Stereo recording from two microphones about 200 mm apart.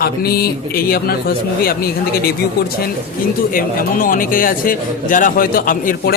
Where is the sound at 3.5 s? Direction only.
45° left (ahead or behind).